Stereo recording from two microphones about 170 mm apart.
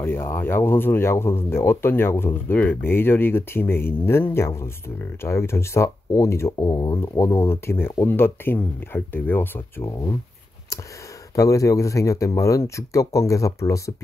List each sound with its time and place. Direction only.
0.0 s speech: 15° left (ahead or behind)
11.3 s speech: 20° left (ahead or behind)